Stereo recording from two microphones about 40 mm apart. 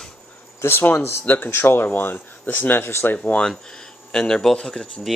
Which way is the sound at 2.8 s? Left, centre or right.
Left.